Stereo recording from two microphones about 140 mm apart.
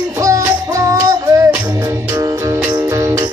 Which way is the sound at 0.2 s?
20° right (ahead or behind).